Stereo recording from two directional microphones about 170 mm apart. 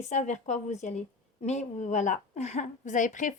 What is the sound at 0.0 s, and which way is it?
Speech, 45° left (ahead or behind).